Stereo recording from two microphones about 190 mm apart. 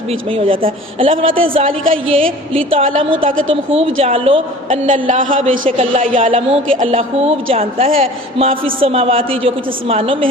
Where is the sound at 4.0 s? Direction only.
30° right (ahead or behind).